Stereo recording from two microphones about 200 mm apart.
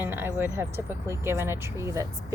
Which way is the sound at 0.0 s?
10° right (ahead or behind).